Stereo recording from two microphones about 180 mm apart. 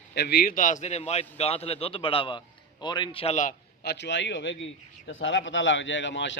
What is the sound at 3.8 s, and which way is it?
A man's voice, 70° left (ahead or behind).